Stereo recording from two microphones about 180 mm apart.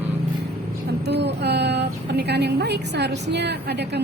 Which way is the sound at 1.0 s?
70° right (ahead or behind).